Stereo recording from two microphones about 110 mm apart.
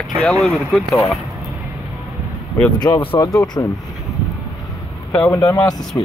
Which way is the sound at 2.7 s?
40° left (ahead or behind).